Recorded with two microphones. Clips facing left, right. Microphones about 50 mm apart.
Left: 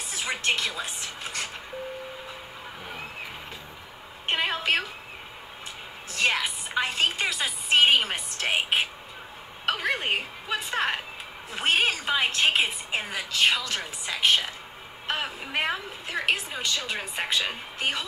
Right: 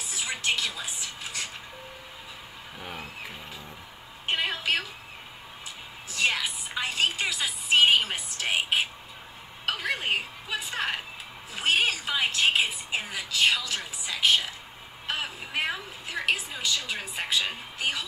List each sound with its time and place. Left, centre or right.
0.1 s music: left
0.7 s speech: left
4.3 s a sound: left
6.1 s music: left
8.5 s whispering: left
9.7 s a sound: left
11.5 s a woman's voice: left
15.0 s vehicle: left
15.5 s a woman's voice: left